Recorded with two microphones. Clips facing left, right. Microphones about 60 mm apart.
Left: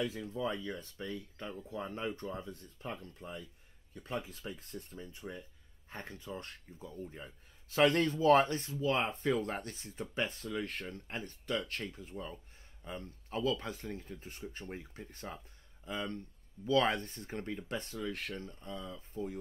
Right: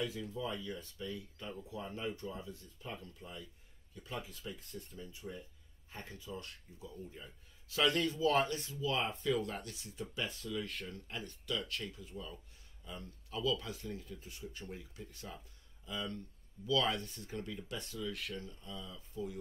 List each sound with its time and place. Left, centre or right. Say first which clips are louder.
0.0 s speech: left 3 dB; left